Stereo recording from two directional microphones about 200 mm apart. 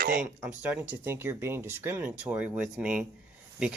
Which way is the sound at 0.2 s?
10° right (ahead or behind).